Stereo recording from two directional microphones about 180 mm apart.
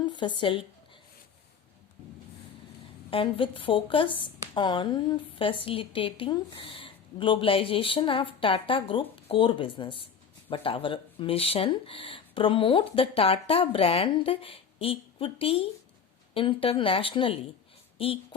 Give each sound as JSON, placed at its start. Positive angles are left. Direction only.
{"t": 0.0, "sound": "speech", "side_deg": 25}
{"t": 3.1, "sound": "a woman's voice", "side_deg": 30}